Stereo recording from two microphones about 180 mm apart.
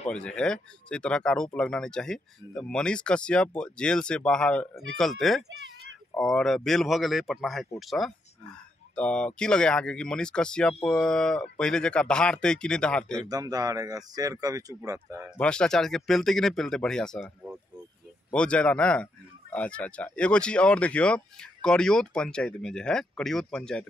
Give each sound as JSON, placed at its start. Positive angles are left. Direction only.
{"t": 0.1, "sound": "speech", "side_deg": 5}
{"t": 13.3, "sound": "speech", "side_deg": -20}
{"t": 15.3, "sound": "speech", "side_deg": 5}